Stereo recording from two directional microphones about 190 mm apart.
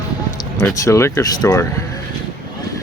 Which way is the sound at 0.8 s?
15° left (ahead or behind).